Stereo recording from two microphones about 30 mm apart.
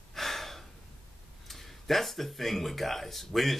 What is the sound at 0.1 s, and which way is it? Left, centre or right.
Gasp, centre.